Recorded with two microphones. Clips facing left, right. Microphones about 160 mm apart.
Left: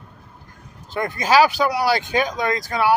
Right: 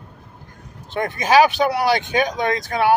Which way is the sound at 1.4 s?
20° right (ahead or behind).